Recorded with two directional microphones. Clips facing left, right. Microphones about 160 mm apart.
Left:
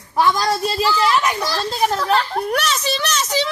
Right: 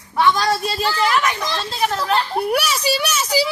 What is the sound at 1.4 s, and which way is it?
A child's voice, centre (ahead or behind).